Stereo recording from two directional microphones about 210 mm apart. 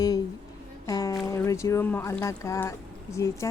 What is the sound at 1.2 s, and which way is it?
Speech, 15° left (ahead or behind).